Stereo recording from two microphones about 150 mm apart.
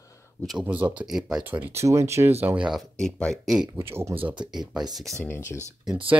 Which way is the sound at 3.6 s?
15° right (ahead or behind).